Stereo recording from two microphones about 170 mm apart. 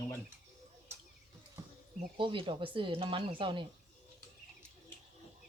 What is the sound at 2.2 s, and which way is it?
Speech, 30° right (ahead or behind).